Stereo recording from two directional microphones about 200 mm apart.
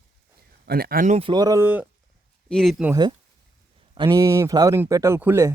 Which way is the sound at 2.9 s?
20° right (ahead or behind).